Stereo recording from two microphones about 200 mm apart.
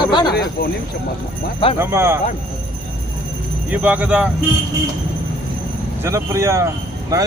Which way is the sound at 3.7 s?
5° right (ahead or behind).